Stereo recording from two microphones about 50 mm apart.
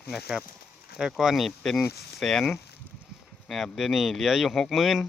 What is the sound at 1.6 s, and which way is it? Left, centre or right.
Speech, centre.